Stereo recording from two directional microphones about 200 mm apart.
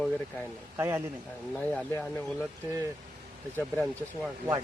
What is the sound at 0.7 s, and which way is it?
Speech, 15° right (ahead or behind).